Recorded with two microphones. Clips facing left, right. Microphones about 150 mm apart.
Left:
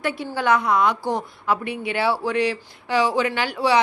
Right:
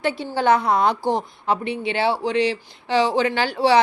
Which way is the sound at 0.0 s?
30° right (ahead or behind).